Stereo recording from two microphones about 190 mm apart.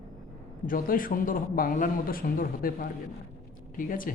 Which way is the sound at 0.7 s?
45° left (ahead or behind).